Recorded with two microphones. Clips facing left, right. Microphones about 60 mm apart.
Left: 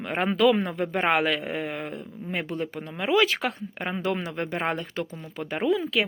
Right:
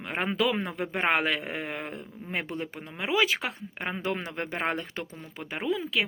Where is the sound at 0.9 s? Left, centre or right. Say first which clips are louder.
Left 2 dB; right.